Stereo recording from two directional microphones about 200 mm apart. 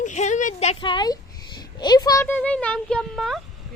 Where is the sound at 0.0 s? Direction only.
35° left (ahead or behind); by 3.4 s centre (ahead or behind).